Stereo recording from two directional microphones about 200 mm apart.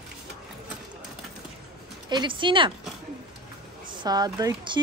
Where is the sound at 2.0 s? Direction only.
25° right (ahead or behind).